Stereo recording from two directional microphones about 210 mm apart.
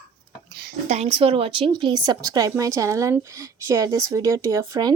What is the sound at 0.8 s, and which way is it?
A woman's voice, 30° right (ahead or behind).